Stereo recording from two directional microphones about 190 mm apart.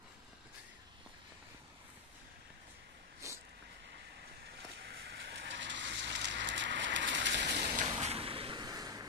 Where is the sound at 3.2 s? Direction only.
15° right (ahead or behind).